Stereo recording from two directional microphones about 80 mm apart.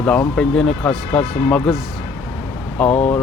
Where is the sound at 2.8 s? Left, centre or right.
Centre.